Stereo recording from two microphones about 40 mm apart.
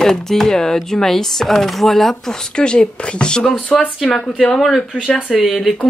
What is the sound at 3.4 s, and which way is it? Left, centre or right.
Speech, centre.